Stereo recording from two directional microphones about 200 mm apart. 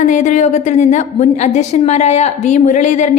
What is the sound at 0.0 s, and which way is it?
A woman's voice, 40° left (ahead or behind).